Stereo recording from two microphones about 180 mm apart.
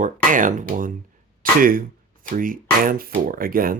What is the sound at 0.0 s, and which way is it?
Speech, 45° right (ahead or behind).